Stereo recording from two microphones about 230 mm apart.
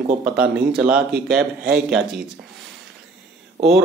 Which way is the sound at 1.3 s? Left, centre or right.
Right.